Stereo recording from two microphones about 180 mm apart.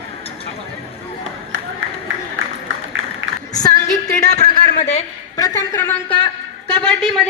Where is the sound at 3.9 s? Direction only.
40° left (ahead or behind).